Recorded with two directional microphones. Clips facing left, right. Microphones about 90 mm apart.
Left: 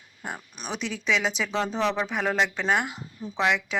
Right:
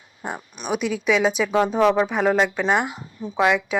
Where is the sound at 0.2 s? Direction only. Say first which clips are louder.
Right 5 dB; 30° right (ahead or behind).